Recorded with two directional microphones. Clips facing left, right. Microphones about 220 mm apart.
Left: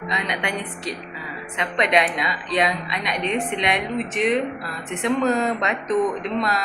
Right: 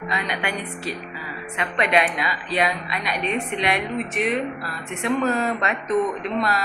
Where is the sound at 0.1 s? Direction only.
20° left (ahead or behind).